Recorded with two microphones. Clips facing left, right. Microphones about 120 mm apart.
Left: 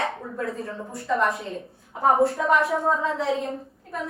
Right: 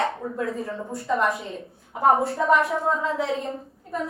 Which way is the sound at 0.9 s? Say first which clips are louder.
Even; 25° right (ahead or behind).